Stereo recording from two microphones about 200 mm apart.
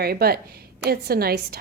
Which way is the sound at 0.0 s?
50° right (ahead or behind).